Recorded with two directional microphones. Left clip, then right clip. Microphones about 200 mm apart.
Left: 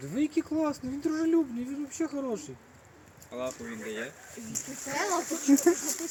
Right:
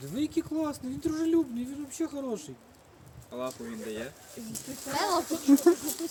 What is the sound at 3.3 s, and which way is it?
Speech, 50° right (ahead or behind).